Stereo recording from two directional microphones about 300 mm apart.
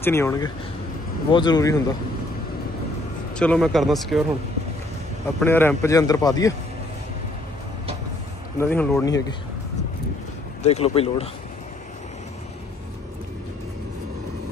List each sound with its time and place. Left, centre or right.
0.0 s a man's voice: centre
3.3 s speech: centre
5.4 s a man's voice: centre
8.5 s a man's voice: centre
10.6 s speech: left